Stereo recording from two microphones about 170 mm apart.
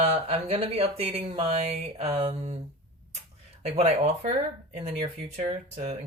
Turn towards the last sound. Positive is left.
turn(degrees=-45)  # may be behind; listen again after turning